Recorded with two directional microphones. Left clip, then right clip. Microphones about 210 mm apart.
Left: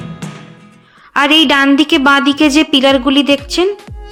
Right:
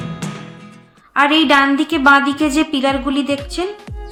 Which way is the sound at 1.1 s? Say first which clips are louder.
Left 3 dB; 50° left (ahead or behind).